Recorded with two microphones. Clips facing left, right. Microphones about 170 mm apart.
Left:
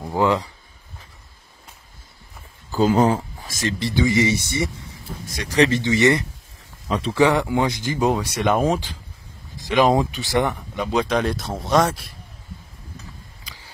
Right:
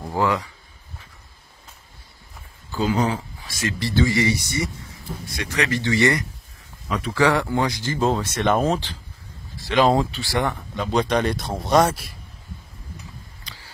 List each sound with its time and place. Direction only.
0.1 s speech: 20° left (ahead or behind)
2.7 s speech: 45° left (ahead or behind)
3.8 s speech: 20° left (ahead or behind)
5.3 s speech: 35° left (ahead or behind)
5.7 s speech: 20° left (ahead or behind)
10.9 s speech: 5° left (ahead or behind)
13.4 s a sound: 10° left (ahead or behind)